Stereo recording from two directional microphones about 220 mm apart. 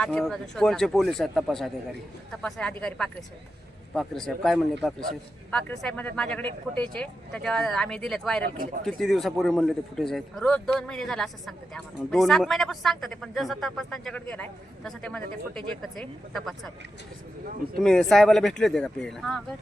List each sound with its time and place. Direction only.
0.0 s a man's voice: 5° left (ahead or behind)
8.5 s speech: 40° right (ahead or behind)
8.8 s a man's voice: centre (ahead or behind)
17.7 s a man's voice: centre (ahead or behind)